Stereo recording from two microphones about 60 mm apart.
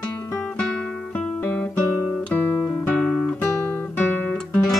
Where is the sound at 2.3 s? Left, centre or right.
Left.